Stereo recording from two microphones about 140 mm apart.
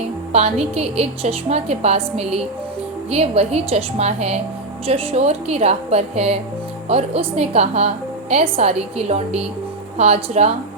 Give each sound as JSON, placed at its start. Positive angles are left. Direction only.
{"t": 0.3, "sound": "a woman's voice", "side_deg": -50}